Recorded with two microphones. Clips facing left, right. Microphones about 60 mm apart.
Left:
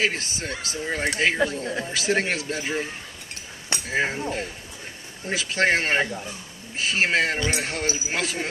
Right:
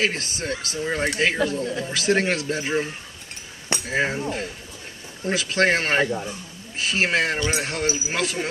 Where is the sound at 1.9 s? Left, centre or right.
Centre.